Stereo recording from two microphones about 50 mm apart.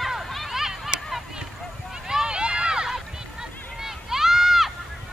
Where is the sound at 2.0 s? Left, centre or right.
Centre.